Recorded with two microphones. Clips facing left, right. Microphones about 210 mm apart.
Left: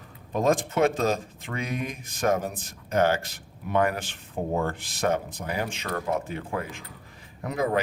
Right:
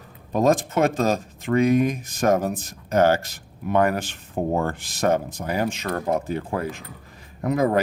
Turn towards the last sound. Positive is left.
turn(degrees=-45)  # may be behind; listen again after turning